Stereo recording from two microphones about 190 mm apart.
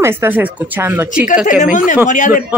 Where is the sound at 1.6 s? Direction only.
40° left (ahead or behind).